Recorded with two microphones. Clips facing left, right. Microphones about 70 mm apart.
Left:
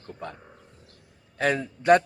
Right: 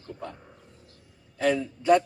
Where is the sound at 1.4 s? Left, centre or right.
Left.